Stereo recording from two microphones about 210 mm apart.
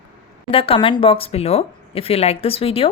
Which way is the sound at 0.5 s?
25° left (ahead or behind).